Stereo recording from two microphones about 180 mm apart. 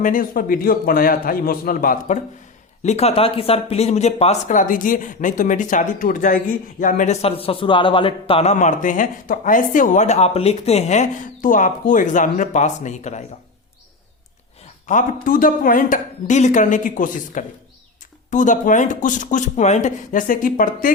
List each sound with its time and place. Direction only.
0.0 s speech: 50° left (ahead or behind)
2.8 s speech: 35° left (ahead or behind)
14.8 s speech: 45° left (ahead or behind)